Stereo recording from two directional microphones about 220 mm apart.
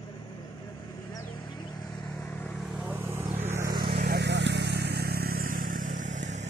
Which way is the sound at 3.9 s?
45° right (ahead or behind).